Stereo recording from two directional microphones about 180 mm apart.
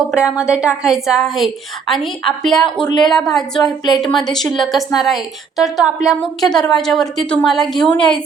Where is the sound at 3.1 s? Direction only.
Centre (ahead or behind).